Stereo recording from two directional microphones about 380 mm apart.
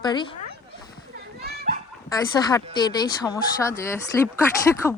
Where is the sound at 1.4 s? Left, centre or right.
Right.